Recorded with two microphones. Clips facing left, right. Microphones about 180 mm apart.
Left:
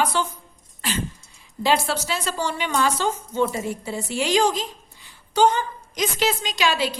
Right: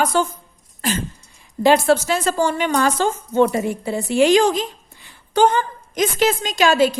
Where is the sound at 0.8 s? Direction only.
45° right (ahead or behind).